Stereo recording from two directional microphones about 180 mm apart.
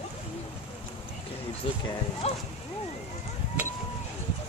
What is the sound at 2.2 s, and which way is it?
Speech, 35° left (ahead or behind).